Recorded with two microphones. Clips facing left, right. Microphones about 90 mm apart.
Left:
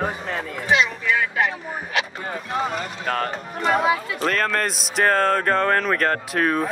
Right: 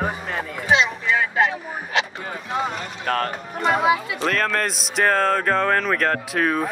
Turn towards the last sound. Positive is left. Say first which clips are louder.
# even
turn(degrees=0)  # may be behind; listen again after turning